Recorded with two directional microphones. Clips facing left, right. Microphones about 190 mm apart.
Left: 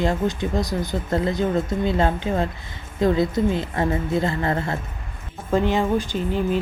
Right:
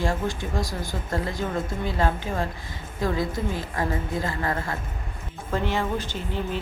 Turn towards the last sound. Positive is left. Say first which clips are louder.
# left 7 dB
turn(degrees=15)  # may be behind; listen again after turning